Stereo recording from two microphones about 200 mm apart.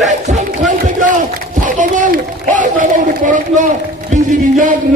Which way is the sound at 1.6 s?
40° right (ahead or behind).